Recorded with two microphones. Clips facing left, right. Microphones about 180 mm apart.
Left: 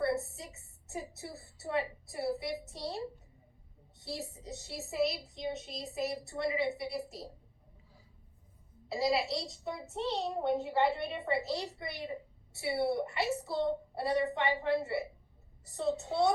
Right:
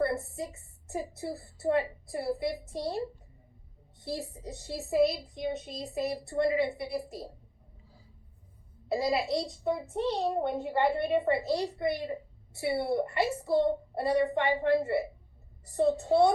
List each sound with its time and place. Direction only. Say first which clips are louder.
0.0 s a sound: right 3 dB; 55° right (ahead or behind)
4.0 s a woman's voice: right 5 dB; 55° right (ahead or behind)
8.9 s a woman's voice: right 3 dB; 50° right (ahead or behind)